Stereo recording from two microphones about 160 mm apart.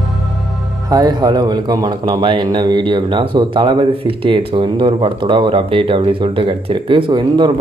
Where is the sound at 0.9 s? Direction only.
25° right (ahead or behind).